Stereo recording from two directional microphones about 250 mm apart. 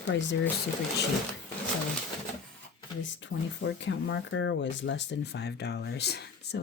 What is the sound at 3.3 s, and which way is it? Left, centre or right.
Speech, left.